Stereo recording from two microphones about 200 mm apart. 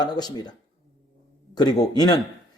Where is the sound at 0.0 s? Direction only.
20° left (ahead or behind).